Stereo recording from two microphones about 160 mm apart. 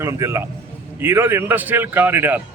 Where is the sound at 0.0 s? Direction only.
15° right (ahead or behind).